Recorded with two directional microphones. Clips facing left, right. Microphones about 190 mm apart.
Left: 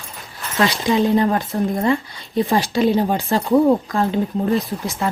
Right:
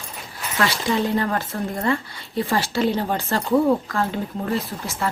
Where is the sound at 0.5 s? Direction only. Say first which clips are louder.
Left 4 dB; 15° left (ahead or behind).